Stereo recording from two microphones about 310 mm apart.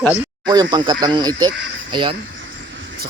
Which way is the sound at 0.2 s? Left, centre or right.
Centre.